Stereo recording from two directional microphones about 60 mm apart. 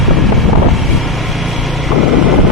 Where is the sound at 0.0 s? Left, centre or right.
Centre.